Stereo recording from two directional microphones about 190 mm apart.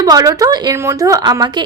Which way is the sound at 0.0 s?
20° right (ahead or behind).